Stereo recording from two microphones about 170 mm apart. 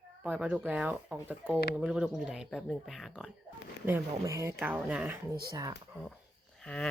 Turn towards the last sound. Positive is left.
turn(degrees=5)  # may be behind; listen again after turning